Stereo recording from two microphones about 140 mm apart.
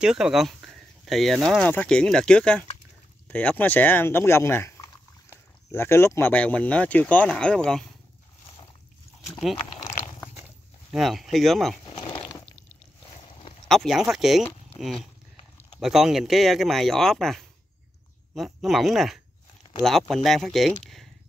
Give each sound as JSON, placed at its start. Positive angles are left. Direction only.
{"t": 0.0, "sound": "speech", "side_deg": -5}
{"t": 9.2, "sound": "speech", "side_deg": 0}
{"t": 10.9, "sound": "speech", "side_deg": 0}
{"t": 12.0, "sound": "a sound", "side_deg": 30}
{"t": 13.3, "sound": "boat", "side_deg": 40}
{"t": 13.7, "sound": "speech", "side_deg": 0}